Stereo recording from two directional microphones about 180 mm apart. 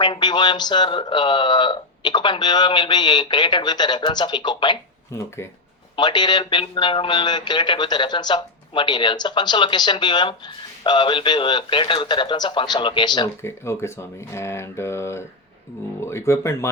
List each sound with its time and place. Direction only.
0.0 s a man's voice: 25° left (ahead or behind)